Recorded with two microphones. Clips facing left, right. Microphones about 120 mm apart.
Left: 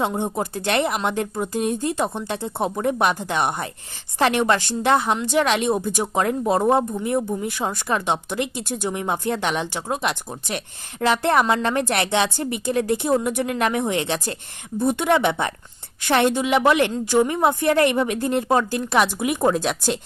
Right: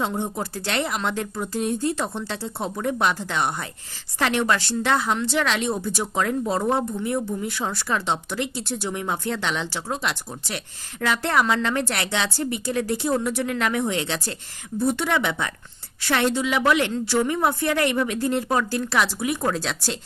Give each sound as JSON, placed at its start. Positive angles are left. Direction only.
{"t": 0.0, "sound": "speech", "side_deg": 20}